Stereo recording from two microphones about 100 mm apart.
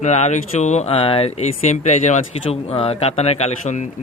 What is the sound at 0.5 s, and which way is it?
Speech, 90° left.